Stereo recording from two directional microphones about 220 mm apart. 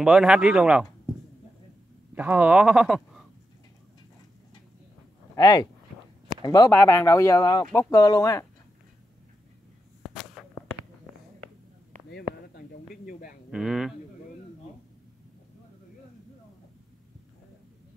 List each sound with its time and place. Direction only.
0.0 s speech: 5° right (ahead or behind)
2.1 s speech: 5° right (ahead or behind)
5.3 s speech: 15° left (ahead or behind)
10.0 s a sound: centre (ahead or behind)
12.5 s a sound: 40° left (ahead or behind)
13.5 s speech: centre (ahead or behind)